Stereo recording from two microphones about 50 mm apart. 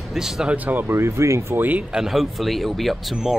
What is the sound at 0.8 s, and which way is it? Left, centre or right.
Speech, right.